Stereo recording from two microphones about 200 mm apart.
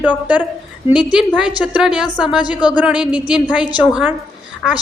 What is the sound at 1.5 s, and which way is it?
A woman's voice, 5° right (ahead or behind).